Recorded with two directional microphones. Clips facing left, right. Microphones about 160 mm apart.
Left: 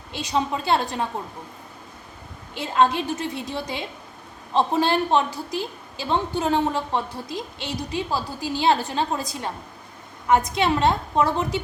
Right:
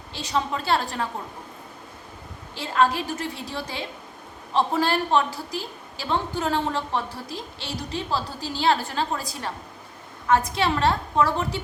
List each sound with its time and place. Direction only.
0.1 s a woman's voice: 15° left (ahead or behind)
2.6 s a woman's voice: 20° left (ahead or behind)